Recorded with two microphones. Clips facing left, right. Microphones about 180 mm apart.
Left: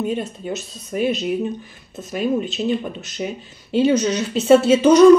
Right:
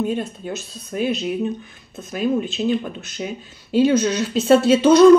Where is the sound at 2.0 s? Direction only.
Centre (ahead or behind).